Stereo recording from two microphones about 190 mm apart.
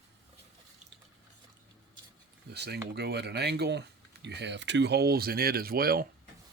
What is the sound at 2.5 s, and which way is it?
Speech, 60° right (ahead or behind).